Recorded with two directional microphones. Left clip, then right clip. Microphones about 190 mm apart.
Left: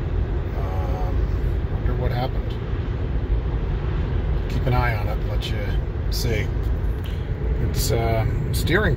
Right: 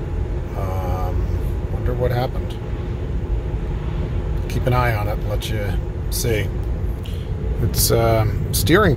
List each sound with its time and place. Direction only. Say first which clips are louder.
2.0 s speech: right 5 dB; 45° right (ahead or behind)
4.6 s speech: right 4 dB; 45° right (ahead or behind)
7.7 s speech: right 7 dB; 40° right (ahead or behind)